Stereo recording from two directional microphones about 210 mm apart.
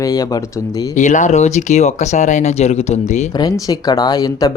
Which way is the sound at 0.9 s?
35° left (ahead or behind).